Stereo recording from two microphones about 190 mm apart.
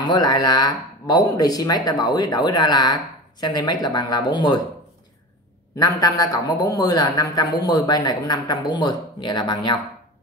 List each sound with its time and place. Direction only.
0.0 s speech: 20° left (ahead or behind)
5.8 s speech: 20° left (ahead or behind)